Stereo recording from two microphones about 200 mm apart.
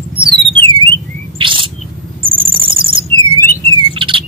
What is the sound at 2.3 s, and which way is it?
Cricket, 25° right (ahead or behind).